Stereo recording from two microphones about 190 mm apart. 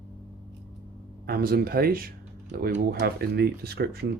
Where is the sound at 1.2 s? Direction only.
50° right (ahead or behind).